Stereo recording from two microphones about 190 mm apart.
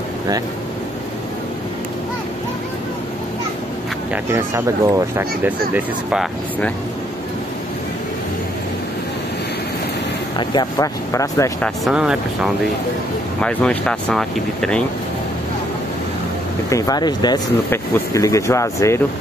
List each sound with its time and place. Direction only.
4.1 s speech: 15° right (ahead or behind)
5.8 s speech: 5° right (ahead or behind)
10.5 s speech: 20° left (ahead or behind)
11.6 s speech: centre (ahead or behind)
16.6 s speech: 15° left (ahead or behind)